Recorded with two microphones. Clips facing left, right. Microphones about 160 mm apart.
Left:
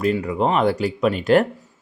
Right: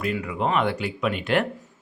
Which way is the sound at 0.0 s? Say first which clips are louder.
Left 6 dB; 35° left (ahead or behind).